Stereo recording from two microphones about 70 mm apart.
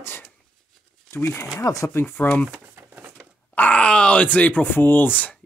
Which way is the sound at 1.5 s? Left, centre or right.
Left.